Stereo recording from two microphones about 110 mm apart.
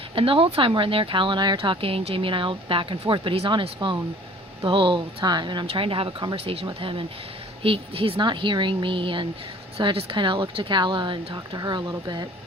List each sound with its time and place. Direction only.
0.2 s speech: 55° right (ahead or behind); by 12.3 s 40° right (ahead or behind)